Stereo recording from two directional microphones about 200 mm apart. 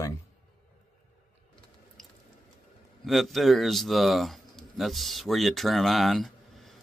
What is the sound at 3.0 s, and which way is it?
Speech, centre (ahead or behind).